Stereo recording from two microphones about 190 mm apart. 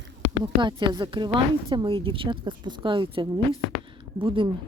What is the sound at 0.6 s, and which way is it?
A woman's voice, 25° right (ahead or behind).